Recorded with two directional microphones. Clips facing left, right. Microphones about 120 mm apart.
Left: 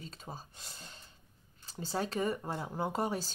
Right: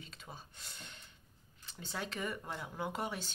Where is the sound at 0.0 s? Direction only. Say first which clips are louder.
Left 5 dB; 35° left (ahead or behind).